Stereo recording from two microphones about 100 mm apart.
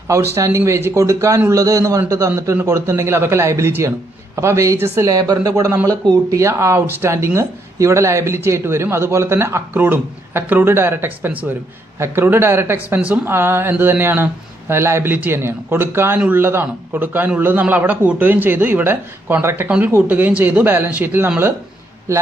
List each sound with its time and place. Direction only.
0.1 s a man's voice: 30° right (ahead or behind)